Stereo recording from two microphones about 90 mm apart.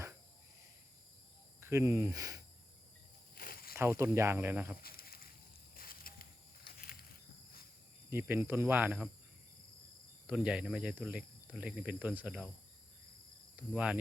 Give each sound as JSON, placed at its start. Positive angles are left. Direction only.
{"t": 1.6, "sound": "speech", "side_deg": -30}
{"t": 3.8, "sound": "speech", "side_deg": -30}
{"t": 8.1, "sound": "speech", "side_deg": -25}
{"t": 10.2, "sound": "speech", "side_deg": -10}
{"t": 13.6, "sound": "speech", "side_deg": -15}